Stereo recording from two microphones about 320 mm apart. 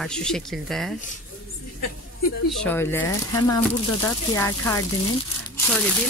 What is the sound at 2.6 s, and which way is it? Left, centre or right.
Speech, centre.